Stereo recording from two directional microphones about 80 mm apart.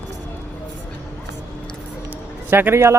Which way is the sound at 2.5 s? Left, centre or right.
Right.